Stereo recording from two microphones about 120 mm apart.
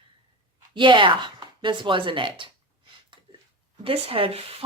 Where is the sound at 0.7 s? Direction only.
40° right (ahead or behind).